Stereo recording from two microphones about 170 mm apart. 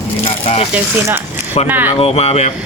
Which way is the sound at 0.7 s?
10° right (ahead or behind).